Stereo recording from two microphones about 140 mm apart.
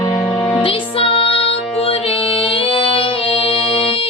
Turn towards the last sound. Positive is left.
turn(degrees=40)  # may be behind; listen again after turning